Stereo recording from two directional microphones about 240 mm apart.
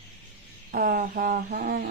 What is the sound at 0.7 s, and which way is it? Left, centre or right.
Speech, right.